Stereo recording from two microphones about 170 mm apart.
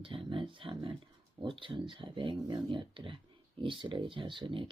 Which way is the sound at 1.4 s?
30° right (ahead or behind).